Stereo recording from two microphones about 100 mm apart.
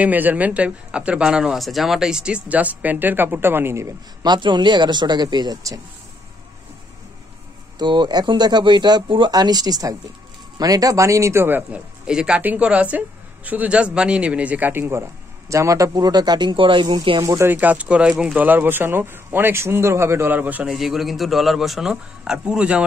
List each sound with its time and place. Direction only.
0.0 s speech: 15° right (ahead or behind)
4.2 s speech: 50° right (ahead or behind)
7.8 s speech: 50° right (ahead or behind); by 11.8 s 20° right (ahead or behind)
12.1 s speech: 10° right (ahead or behind); by 17.2 s 50° right (ahead or behind)
17.2 s speech: 30° right (ahead or behind)
17.5 s speech: 15° right (ahead or behind)
20.6 s a man's voice: 5° right (ahead or behind)